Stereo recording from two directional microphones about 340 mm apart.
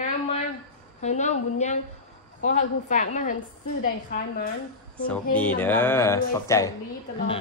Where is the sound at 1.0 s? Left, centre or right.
Centre.